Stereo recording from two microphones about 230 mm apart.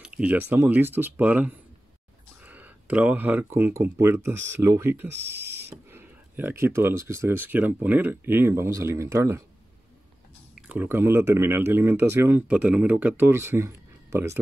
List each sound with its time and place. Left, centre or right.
0.0 s speech: centre
10.7 s speech: centre